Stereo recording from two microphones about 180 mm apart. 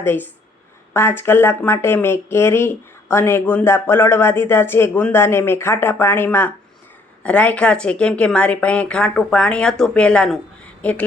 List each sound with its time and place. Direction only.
0.0 s speech: 10° left (ahead or behind)